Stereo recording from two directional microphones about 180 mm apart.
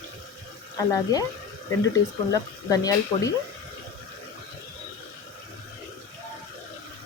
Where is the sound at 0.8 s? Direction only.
20° left (ahead or behind).